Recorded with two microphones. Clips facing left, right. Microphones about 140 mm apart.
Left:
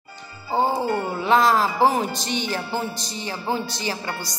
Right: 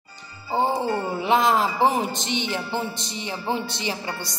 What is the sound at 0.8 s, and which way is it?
A woman's voice, 20° right (ahead or behind).